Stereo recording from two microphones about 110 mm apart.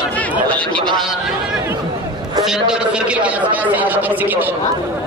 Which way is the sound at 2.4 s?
5° right (ahead or behind).